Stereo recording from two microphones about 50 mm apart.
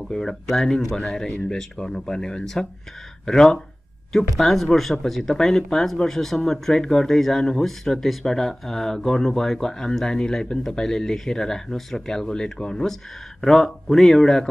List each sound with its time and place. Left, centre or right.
0.1 s speech: centre